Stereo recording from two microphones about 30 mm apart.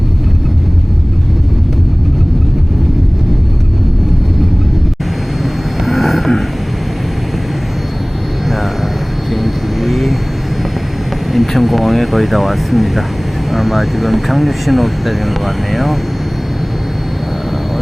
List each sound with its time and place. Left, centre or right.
5.8 s a sound: centre
9.3 s vehicle: centre
11.3 s vehicle: centre
13.5 s speech: centre